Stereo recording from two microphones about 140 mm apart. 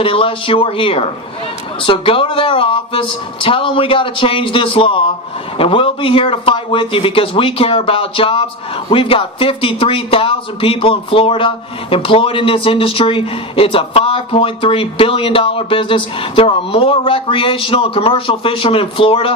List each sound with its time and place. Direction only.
0.0 s speech: 40° left (ahead or behind)